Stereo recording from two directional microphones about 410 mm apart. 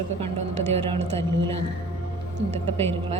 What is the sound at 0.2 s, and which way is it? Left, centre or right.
A woman's voice, centre.